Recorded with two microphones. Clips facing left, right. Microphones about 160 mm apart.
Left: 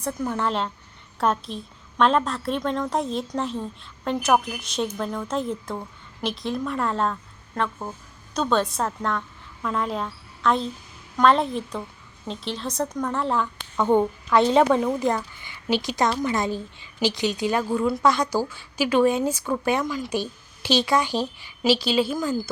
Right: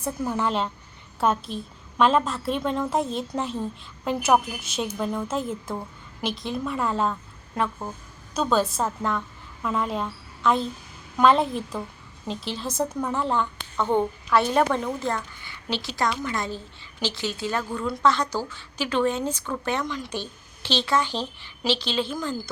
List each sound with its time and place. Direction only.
0.0 s a woman's voice: 5° right (ahead or behind)
13.7 s a woman's voice: 15° left (ahead or behind)